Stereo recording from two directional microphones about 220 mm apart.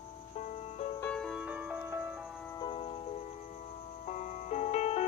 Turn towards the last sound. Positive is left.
turn(degrees=30)  # may be behind; listen again after turning